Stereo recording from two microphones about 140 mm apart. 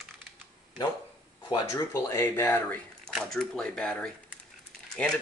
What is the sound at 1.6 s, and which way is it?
Speech, 20° left (ahead or behind).